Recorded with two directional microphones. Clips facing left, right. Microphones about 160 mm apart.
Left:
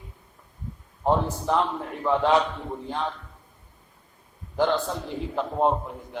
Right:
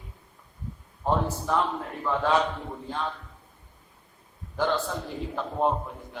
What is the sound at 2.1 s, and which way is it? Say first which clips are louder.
Speech: left 5 dB; 20° left (ahead or behind).